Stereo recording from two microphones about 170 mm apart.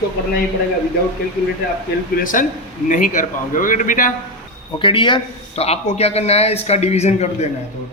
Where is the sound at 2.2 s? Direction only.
50° left (ahead or behind).